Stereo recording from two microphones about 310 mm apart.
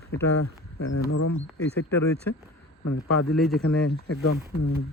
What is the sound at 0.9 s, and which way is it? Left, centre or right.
Speech, left.